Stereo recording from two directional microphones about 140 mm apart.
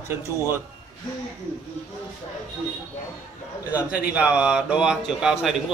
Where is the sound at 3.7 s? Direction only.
10° right (ahead or behind).